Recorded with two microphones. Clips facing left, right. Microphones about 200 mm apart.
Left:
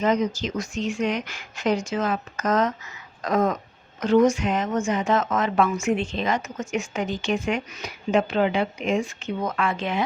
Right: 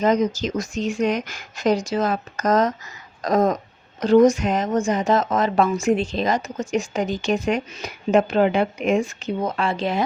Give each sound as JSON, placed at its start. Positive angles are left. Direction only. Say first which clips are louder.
{"t": 0.0, "sound": "speech", "louder": "right 3 dB", "side_deg": -40}
{"t": 9.5, "sound": "speech", "louder": "right 1 dB", "side_deg": -30}